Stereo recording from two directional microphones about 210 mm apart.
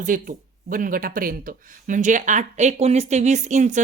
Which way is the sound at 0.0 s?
40° right (ahead or behind).